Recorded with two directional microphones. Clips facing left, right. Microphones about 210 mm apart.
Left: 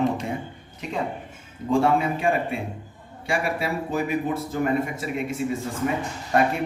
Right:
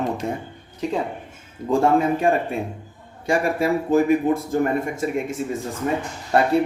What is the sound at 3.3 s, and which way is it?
Speech, 45° right (ahead or behind).